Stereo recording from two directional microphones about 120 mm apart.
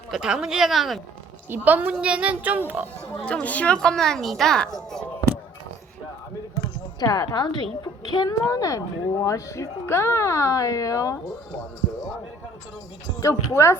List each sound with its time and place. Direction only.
0.1 s a woman's voice: 5° right (ahead or behind)
1.5 s a woman's voice: 15° right (ahead or behind)
3.4 s a woman's voice: 10° left (ahead or behind)
4.9 s a sound: 10° left (ahead or behind)
7.0 s a woman's voice: 35° left (ahead or behind)
13.1 s a woman's voice: 25° left (ahead or behind)